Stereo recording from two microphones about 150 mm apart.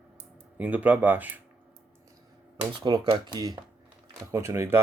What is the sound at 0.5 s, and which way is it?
Speech, 10° right (ahead or behind).